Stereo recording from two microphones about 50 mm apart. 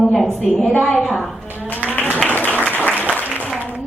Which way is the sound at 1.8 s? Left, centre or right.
Left.